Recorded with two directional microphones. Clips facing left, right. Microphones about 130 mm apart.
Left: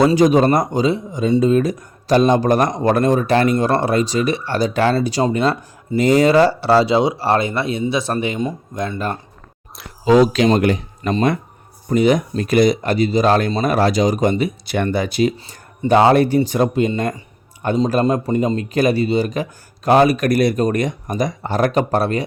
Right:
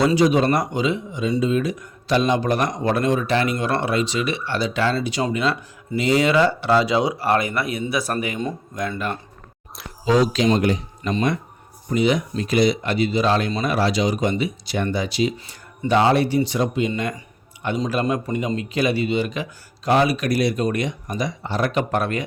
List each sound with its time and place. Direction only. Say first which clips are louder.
0.0 s speech: left 4 dB; 45° left (ahead or behind)
10.1 s speech: left 5 dB; 60° left (ahead or behind)
11.9 s speech: left 5 dB; 45° left (ahead or behind)